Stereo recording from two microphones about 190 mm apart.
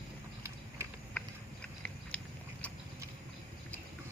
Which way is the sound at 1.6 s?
5° left (ahead or behind).